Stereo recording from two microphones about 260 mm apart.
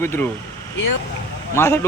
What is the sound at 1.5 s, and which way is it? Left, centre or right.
Speech, centre.